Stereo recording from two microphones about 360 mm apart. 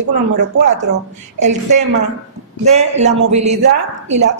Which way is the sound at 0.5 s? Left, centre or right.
Right.